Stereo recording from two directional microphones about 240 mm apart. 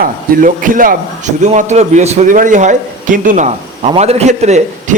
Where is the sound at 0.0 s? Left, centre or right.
Right.